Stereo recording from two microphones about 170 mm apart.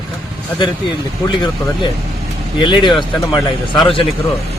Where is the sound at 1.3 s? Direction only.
30° left (ahead or behind).